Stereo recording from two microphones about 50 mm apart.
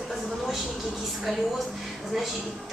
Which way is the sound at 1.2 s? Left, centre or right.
Centre.